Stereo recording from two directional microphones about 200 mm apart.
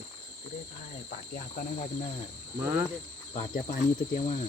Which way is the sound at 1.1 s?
40° left (ahead or behind).